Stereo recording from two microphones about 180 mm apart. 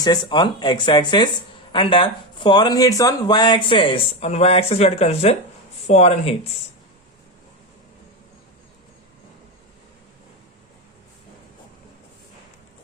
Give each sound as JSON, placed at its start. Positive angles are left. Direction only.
{"t": 0.0, "sound": "speech", "side_deg": 25}